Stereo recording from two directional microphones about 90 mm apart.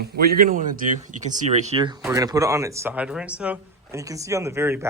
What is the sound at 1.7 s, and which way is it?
Speech, 70° right (ahead or behind).